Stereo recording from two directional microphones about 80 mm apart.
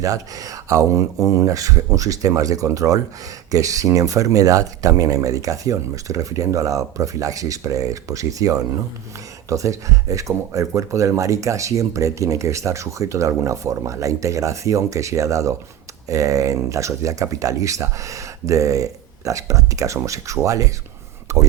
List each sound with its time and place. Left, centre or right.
0.0 s speech: right